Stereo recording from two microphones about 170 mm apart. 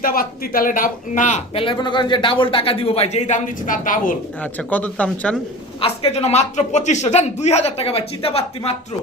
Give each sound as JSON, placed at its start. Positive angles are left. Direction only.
{"t": 0.0, "sound": "speech", "side_deg": 60}
{"t": 1.5, "sound": "speech", "side_deg": 30}
{"t": 4.5, "sound": "speech", "side_deg": 10}
{"t": 5.8, "sound": "speech", "side_deg": 35}